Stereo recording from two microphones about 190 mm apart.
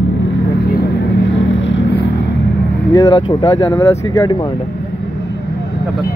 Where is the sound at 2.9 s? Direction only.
20° left (ahead or behind).